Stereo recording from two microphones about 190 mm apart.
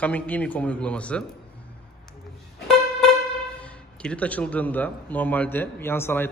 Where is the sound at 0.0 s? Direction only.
5° left (ahead or behind).